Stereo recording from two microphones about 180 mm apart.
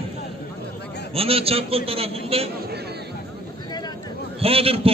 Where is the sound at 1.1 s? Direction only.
35° right (ahead or behind).